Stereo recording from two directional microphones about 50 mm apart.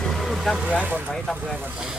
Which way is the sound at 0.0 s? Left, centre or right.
Centre.